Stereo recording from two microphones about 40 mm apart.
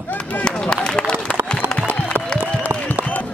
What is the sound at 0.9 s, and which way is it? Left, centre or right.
Run, left.